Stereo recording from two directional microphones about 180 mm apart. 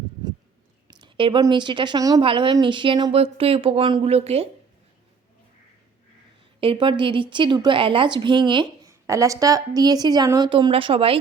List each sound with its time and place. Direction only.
0.9 s a woman's voice: 25° right (ahead or behind)
6.6 s a woman's voice: 30° right (ahead or behind)